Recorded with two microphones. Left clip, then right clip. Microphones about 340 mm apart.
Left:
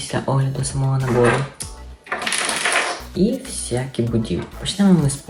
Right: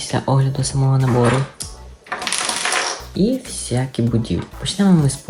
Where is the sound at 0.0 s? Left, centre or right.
Right.